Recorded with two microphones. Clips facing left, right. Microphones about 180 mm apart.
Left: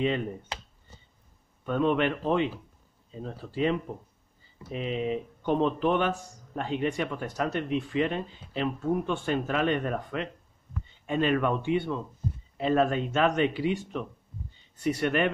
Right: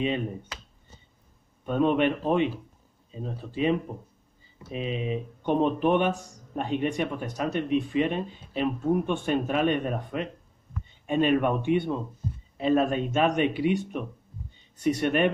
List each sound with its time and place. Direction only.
1.7 s speech: 20° right (ahead or behind)